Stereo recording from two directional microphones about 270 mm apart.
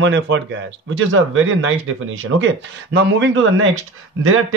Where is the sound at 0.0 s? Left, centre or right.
Right.